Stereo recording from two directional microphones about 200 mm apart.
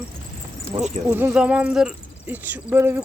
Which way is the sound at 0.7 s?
25° right (ahead or behind).